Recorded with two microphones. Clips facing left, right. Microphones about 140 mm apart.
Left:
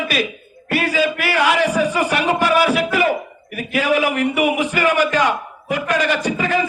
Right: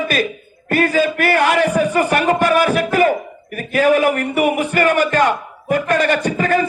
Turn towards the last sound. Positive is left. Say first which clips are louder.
# right 2 dB
turn(degrees=-50)  # may be behind; listen again after turning